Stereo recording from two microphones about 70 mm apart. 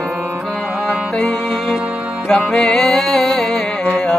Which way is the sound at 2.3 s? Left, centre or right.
Centre.